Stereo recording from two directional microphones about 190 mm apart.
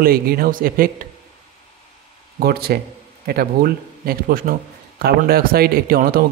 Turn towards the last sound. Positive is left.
turn(degrees=-50)  # may be behind; listen again after turning